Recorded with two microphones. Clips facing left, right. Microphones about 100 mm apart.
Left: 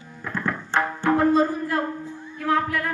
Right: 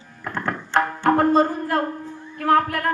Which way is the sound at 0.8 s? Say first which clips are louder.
Right 3 dB; 55° right (ahead or behind).